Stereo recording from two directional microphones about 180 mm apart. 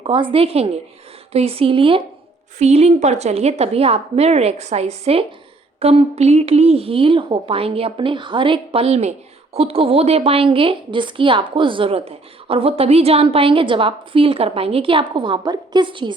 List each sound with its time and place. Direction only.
0.0 s a woman's voice: 30° right (ahead or behind)